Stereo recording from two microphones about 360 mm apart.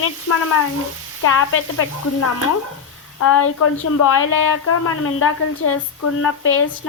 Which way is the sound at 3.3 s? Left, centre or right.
Left.